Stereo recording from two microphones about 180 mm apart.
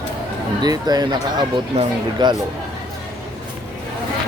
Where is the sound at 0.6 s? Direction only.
20° right (ahead or behind).